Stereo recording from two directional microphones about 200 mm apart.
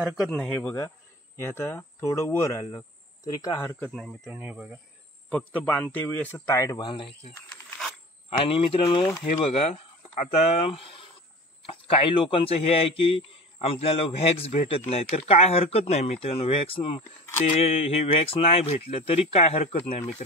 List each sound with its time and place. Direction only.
0.0 s speech: centre (ahead or behind); by 3.9 s 15° left (ahead or behind)
4.2 s speech: 10° right (ahead or behind)
5.3 s a man's voice: 5° left (ahead or behind); by 20.2 s 30° left (ahead or behind)